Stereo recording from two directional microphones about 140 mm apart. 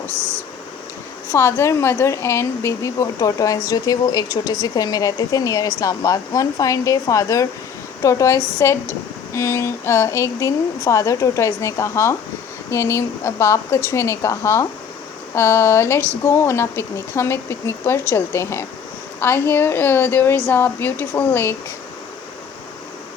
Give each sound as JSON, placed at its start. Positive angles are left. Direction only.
{"t": 1.3, "sound": "speech", "side_deg": 20}